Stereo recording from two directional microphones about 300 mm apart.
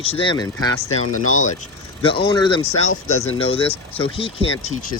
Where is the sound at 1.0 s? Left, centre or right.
Left.